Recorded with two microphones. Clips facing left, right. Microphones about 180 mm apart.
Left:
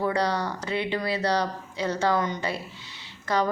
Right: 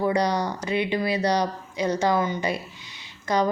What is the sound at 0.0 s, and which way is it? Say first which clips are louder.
Speech: right 3 dB; 15° right (ahead or behind).